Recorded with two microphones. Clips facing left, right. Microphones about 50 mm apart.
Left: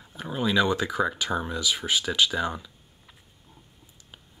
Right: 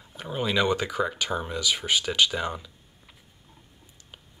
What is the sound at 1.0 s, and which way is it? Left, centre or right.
Speech, centre.